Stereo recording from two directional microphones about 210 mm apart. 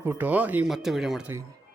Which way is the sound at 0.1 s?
10° right (ahead or behind).